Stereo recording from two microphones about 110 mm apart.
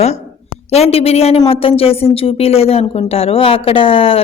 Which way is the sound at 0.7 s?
70° left (ahead or behind).